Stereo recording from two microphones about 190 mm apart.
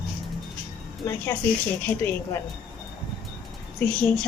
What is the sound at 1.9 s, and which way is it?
Speech, 30° left (ahead or behind).